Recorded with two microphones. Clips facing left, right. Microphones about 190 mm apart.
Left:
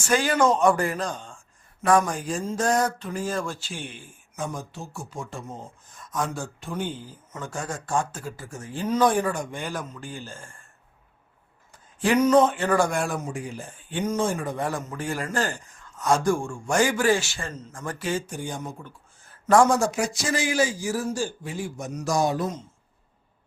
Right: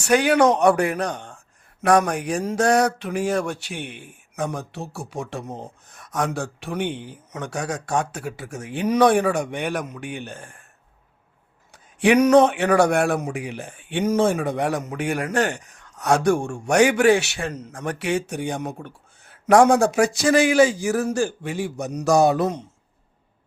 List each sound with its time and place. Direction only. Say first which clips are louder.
0.0 s speech: right 5 dB; 65° right (ahead or behind)
11.7 s speech: right 5 dB; 75° right (ahead or behind)